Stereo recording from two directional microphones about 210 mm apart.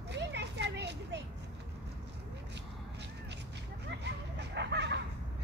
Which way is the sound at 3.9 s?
55° right (ahead or behind).